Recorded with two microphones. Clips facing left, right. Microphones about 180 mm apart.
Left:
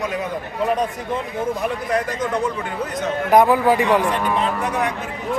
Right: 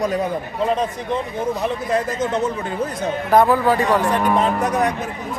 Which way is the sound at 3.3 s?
15° left (ahead or behind).